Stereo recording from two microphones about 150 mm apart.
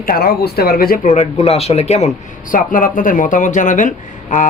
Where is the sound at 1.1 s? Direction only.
45° left (ahead or behind).